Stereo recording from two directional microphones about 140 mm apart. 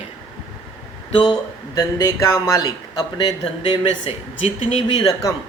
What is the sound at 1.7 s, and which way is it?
Speech, 25° left (ahead or behind).